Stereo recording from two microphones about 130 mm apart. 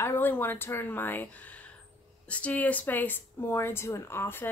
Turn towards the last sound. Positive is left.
turn(degrees=15)  # may be behind; listen again after turning